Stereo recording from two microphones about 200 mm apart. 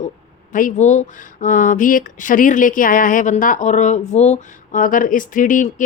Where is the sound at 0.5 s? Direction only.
40° left (ahead or behind).